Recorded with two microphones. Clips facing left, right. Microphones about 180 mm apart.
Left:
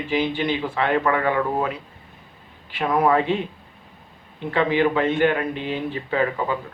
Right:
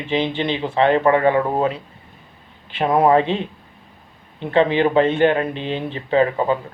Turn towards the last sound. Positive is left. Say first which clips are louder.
# right 6 dB
turn(degrees=-30)  # may be behind; listen again after turning